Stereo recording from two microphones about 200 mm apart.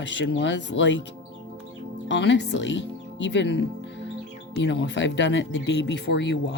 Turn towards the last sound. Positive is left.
turn(degrees=60)  # may be behind; listen again after turning